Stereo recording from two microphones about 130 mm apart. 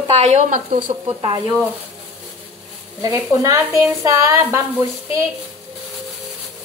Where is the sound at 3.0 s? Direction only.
25° right (ahead or behind).